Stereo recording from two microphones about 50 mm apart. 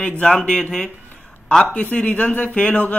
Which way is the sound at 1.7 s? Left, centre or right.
Left.